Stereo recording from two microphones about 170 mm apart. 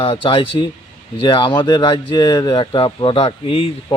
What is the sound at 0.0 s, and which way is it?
A man's voice, 30° left (ahead or behind).